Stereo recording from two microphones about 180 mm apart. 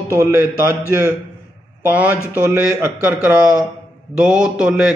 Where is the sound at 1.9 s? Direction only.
10° right (ahead or behind).